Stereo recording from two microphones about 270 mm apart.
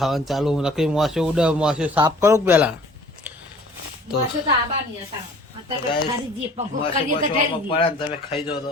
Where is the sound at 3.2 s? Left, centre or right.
Centre.